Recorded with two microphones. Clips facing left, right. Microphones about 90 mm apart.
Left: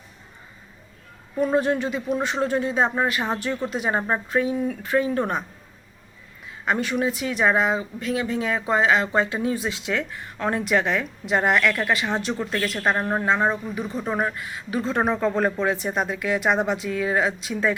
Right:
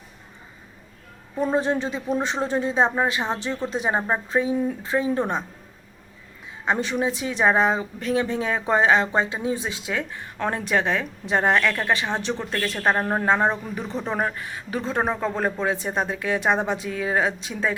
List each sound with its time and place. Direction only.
1.5 s speech: 25° right (ahead or behind)
6.7 s speech: 25° right (ahead or behind)
15.1 s speech: 15° right (ahead or behind)